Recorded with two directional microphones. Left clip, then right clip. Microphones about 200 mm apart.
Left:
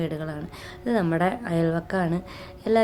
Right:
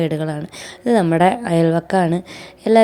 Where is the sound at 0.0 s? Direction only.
35° right (ahead or behind).